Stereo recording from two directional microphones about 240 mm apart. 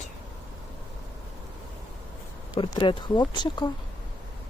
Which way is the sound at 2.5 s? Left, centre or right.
Centre.